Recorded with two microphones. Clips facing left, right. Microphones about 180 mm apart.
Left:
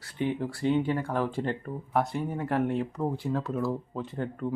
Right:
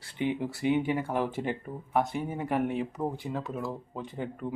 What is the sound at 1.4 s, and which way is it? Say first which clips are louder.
Speech: left 2 dB; 5° right (ahead or behind).